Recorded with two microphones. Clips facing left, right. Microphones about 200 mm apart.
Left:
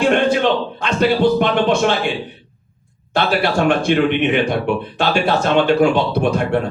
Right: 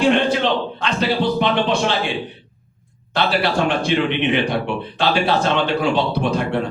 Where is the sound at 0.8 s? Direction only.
50° left (ahead or behind).